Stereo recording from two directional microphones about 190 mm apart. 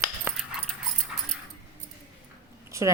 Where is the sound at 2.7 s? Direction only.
15° right (ahead or behind).